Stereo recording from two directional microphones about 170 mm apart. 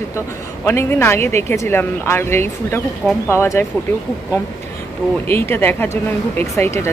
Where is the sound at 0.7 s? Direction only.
15° left (ahead or behind).